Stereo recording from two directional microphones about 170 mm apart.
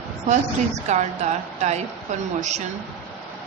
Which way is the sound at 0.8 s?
45° right (ahead or behind).